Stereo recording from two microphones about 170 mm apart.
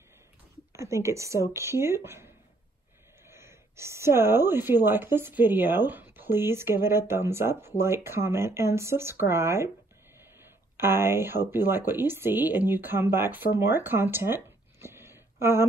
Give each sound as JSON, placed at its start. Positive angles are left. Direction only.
{"t": 0.7, "sound": "speech", "side_deg": -15}
{"t": 10.8, "sound": "speech", "side_deg": -15}